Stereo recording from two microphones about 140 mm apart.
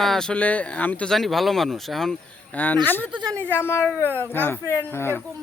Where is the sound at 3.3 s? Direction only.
15° left (ahead or behind).